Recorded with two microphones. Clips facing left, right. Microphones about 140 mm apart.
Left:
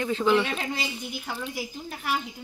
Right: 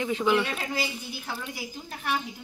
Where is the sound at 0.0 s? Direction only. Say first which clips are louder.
Left 2 dB; 10° right (ahead or behind).